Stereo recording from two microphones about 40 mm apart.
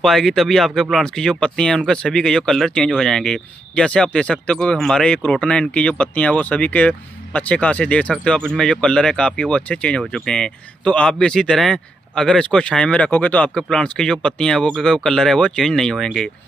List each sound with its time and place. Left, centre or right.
0.0 s speech: centre
3.7 s speech: left
5.7 s speech: left
8.2 s speech: left
9.5 s speech: left
10.1 s speech: centre
13.1 s speech: left
13.6 s speech: left
14.8 s speech: centre